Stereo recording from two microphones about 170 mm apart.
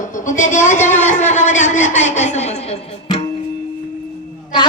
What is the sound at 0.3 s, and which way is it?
Speech, 45° left (ahead or behind).